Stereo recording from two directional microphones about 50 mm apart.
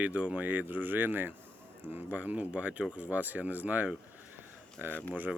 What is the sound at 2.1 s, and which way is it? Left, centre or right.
Speech, right.